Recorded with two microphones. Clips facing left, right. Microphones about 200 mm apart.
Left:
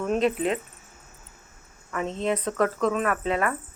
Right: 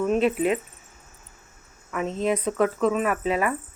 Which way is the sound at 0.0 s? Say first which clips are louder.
Right 2 dB; 5° right (ahead or behind).